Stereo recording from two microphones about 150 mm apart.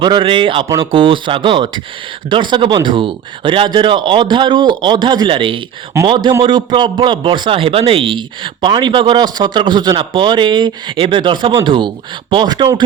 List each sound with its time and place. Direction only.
0.0 s speech: 30° right (ahead or behind)